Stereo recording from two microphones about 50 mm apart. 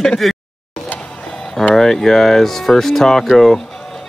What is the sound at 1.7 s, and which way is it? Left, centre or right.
Speech, centre.